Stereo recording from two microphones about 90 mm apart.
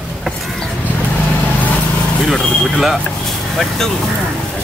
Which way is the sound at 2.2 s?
5° right (ahead or behind).